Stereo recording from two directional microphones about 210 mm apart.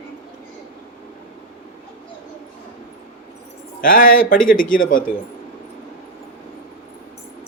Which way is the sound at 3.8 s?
40° left (ahead or behind).